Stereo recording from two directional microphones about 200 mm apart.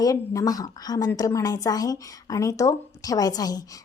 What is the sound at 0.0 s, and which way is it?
A woman's voice, 15° left (ahead or behind).